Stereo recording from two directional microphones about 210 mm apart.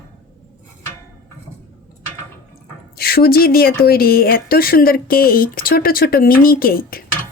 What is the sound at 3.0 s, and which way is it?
Speech, 45° left (ahead or behind).